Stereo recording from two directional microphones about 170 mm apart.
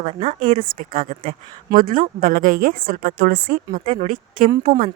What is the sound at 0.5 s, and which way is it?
A woman's voice, 50° right (ahead or behind).